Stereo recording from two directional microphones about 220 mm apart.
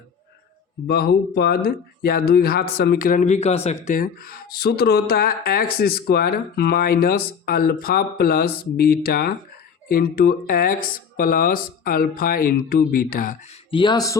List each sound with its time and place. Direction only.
0.9 s speech: 45° left (ahead or behind)
13.7 s speech: 20° left (ahead or behind)